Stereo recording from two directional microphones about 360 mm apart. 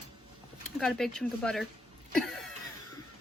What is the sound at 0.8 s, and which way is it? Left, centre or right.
Speech, centre.